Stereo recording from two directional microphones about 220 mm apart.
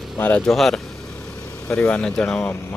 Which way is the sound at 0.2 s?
5° left (ahead or behind).